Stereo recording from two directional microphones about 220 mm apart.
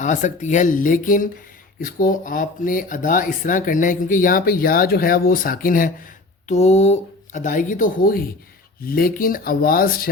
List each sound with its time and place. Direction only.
0.0 s speech: 35° left (ahead or behind)